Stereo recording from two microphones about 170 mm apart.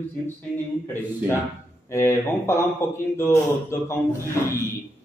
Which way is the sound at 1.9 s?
15° left (ahead or behind).